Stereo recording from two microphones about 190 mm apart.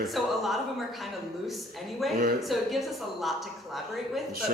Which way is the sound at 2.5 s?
Centre (ahead or behind).